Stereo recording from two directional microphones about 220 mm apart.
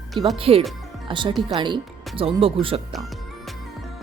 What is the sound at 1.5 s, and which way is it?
Speech, 20° right (ahead or behind).